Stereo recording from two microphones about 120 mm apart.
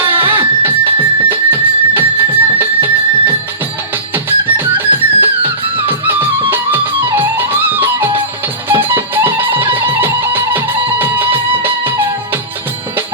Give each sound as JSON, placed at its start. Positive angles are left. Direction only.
{"t": 0.0, "sound": "music", "side_deg": -15}